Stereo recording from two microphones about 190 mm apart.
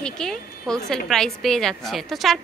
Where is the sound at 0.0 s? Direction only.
5° left (ahead or behind).